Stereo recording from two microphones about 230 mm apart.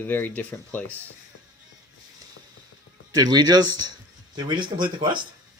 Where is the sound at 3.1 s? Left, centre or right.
Centre.